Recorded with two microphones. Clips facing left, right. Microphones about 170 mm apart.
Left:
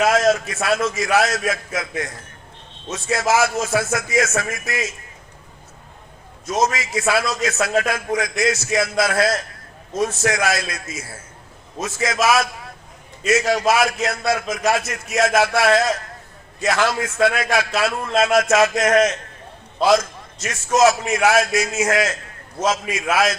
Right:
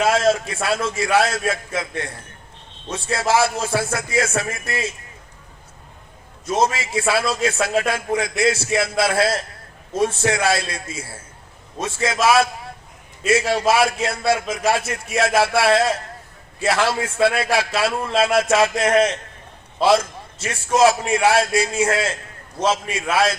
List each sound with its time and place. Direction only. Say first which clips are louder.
0.0 s a man's voice: left 1 dB; 30° right (ahead or behind)
2.9 s a man's voice: even; 30° right (ahead or behind)
6.4 s a man's voice: right 1 dB; 30° right (ahead or behind)